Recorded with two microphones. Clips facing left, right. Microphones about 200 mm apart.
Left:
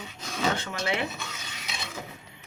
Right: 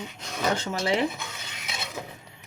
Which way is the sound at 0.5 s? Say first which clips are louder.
Right 4 dB; 40° right (ahead or behind).